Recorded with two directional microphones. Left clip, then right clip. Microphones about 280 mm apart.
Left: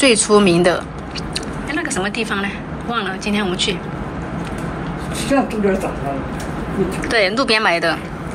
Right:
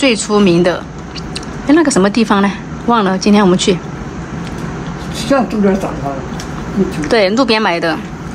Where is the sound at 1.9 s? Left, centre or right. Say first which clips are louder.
Right 9 dB; centre.